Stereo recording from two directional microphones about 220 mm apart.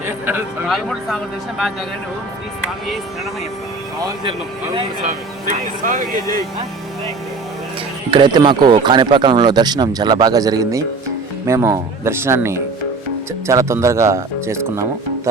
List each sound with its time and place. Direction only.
0.0 s speech: 10° right (ahead or behind)
5.0 s speech: 35° right (ahead or behind)
6.1 s speech: 15° left (ahead or behind)
8.1 s speech: 20° right (ahead or behind)